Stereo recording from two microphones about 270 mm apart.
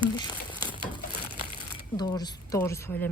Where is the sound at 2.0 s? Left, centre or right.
Centre.